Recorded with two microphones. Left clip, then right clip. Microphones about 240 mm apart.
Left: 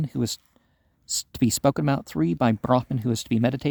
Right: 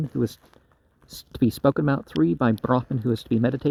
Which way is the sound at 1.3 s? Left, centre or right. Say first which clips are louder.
Right 2 dB; left.